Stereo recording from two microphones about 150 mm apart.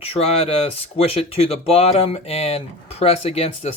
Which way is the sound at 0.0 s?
40° left (ahead or behind).